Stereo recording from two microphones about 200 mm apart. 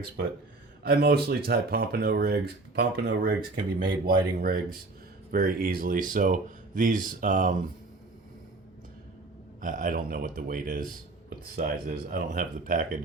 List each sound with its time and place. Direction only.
0.9 s speech: 55° right (ahead or behind)
4.0 s speech: 45° right (ahead or behind)
9.6 s speech: 45° right (ahead or behind)
12.1 s speech: 45° right (ahead or behind)